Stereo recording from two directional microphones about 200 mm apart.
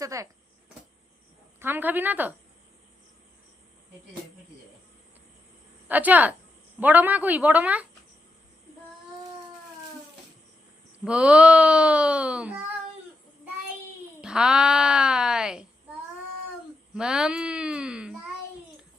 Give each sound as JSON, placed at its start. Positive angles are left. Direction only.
{"t": 0.0, "sound": "speech", "side_deg": -15}
{"t": 1.5, "sound": "a woman's voice", "side_deg": -10}
{"t": 5.9, "sound": "a woman's voice", "side_deg": -10}
{"t": 11.0, "sound": "speech", "side_deg": -5}
{"t": 14.2, "sound": "a woman's voice", "side_deg": -5}